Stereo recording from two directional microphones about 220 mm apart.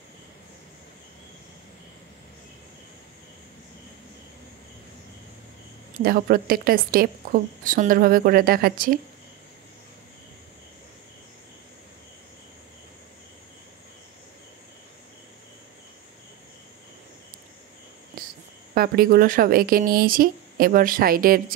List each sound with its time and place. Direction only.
6.0 s a woman's voice: 40° right (ahead or behind)
18.8 s a woman's voice: 40° right (ahead or behind)